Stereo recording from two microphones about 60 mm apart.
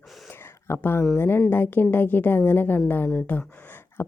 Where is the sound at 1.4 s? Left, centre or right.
Left.